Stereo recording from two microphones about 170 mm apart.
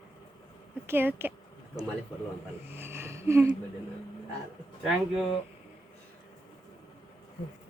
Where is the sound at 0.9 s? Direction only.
10° right (ahead or behind).